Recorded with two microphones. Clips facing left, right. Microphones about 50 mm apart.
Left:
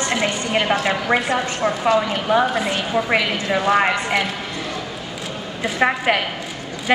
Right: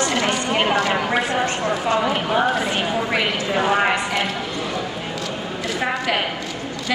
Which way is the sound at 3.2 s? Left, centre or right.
Centre.